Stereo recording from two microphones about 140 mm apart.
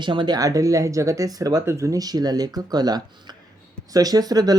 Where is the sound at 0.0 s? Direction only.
35° right (ahead or behind).